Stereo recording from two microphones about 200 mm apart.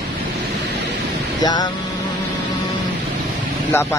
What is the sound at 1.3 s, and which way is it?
Vehicle, 20° left (ahead or behind).